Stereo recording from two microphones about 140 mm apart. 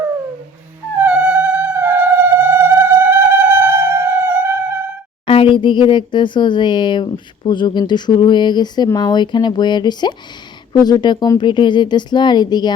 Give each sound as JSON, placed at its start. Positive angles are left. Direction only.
{"t": 1.0, "sound": "music", "side_deg": -10}
{"t": 5.2, "sound": "speech", "side_deg": 40}